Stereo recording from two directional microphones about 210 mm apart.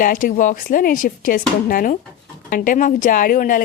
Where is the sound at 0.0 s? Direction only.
40° left (ahead or behind).